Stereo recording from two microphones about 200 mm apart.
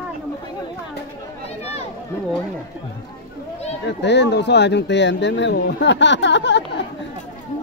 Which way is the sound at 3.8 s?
60° left (ahead or behind).